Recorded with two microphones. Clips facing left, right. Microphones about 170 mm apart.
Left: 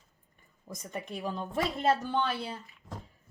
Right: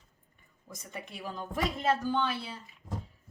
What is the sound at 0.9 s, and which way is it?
Speech, 35° left (ahead or behind).